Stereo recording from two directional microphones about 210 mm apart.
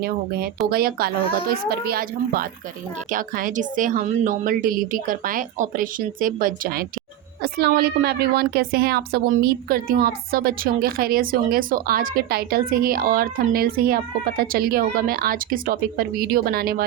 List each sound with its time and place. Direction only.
0.0 s a woman's voice: 45° right (ahead or behind)